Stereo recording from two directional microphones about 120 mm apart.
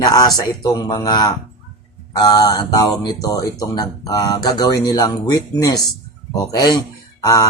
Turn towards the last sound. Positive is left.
turn(degrees=30)  # may be behind; listen again after turning